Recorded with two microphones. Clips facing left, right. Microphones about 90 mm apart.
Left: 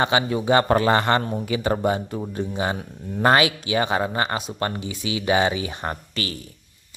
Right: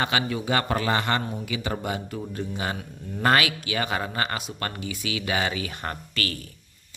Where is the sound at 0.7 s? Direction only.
40° left (ahead or behind); by 6.3 s 20° left (ahead or behind).